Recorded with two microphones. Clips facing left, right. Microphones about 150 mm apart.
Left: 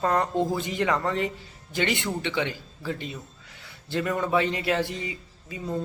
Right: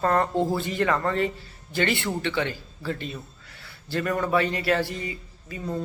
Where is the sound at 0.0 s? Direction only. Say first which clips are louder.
Right 1 dB; 15° left (ahead or behind).